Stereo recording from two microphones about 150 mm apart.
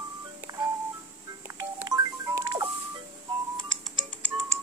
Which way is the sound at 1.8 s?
25° right (ahead or behind).